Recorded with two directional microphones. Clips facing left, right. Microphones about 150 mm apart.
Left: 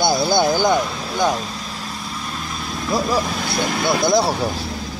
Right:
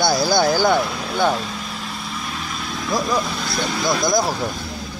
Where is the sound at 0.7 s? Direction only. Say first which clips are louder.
Even; centre (ahead or behind).